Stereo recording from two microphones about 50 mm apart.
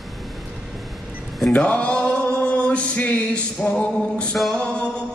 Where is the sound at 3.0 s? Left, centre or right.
Left.